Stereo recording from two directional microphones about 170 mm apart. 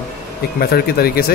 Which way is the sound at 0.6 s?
70° left (ahead or behind).